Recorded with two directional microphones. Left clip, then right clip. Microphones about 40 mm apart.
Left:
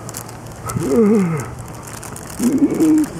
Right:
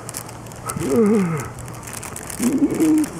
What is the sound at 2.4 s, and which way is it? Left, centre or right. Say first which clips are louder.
Bird: left 3 dB; right.